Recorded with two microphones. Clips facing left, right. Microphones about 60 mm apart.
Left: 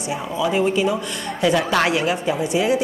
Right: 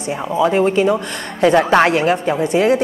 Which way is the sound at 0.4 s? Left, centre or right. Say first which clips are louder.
Right 5 dB; right.